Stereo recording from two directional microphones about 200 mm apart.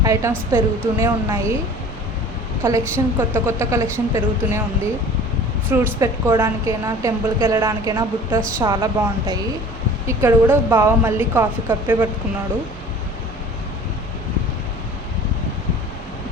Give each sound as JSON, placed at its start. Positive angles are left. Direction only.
{"t": 0.0, "sound": "a woman's voice", "side_deg": -15}
{"t": 2.6, "sound": "a woman's voice", "side_deg": -15}
{"t": 5.7, "sound": "a woman's voice", "side_deg": -10}